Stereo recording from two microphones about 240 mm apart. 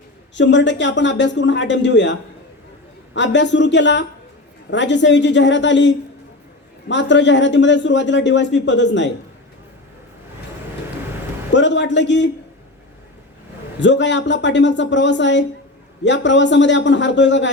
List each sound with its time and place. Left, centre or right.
0.3 s a man's voice: left
3.2 s a man's voice: left
11.5 s a man's voice: left
13.7 s a man's voice: left